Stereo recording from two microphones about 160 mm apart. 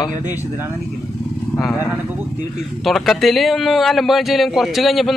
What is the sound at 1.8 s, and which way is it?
Speech, 10° right (ahead or behind).